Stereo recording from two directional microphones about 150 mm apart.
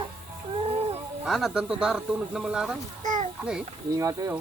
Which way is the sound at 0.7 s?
45° right (ahead or behind).